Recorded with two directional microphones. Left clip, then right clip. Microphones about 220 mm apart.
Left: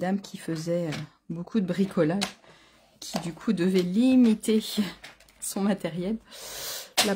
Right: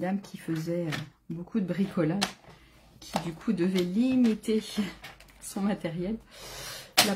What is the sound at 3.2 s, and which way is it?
Speech, 45° left (ahead or behind).